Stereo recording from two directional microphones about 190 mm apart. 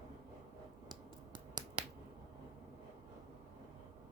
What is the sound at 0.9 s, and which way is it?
Finger snapping, 20° right (ahead or behind).